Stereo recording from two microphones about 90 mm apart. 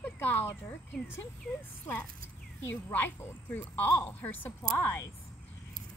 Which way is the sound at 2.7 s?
25° left (ahead or behind).